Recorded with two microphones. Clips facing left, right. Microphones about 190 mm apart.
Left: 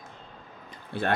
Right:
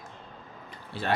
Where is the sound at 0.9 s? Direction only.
55° left (ahead or behind).